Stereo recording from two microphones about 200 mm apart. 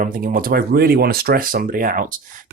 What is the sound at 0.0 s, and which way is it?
Speech, 40° right (ahead or behind).